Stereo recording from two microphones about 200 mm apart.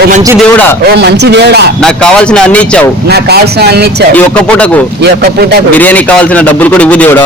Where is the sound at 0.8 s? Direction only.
55° right (ahead or behind).